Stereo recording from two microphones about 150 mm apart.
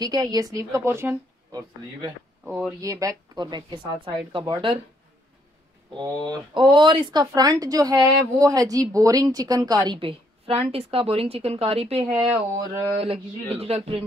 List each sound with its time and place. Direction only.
0.0 s speech: 25° right (ahead or behind)
2.8 s speech: 20° right (ahead or behind)
5.9 s speech: 30° right (ahead or behind)
12.5 s speech: 25° right (ahead or behind)
13.0 s speech: 40° right (ahead or behind)